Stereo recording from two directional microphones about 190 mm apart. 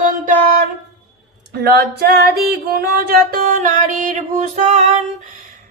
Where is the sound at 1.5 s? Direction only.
60° right (ahead or behind); by 4.8 s 40° right (ahead or behind).